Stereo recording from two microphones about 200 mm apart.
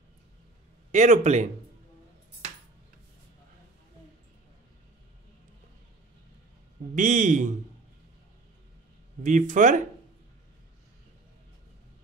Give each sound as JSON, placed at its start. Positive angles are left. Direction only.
{"t": 0.9, "sound": "speech", "side_deg": -35}
{"t": 7.0, "sound": "speech", "side_deg": -40}
{"t": 9.2, "sound": "speech", "side_deg": -40}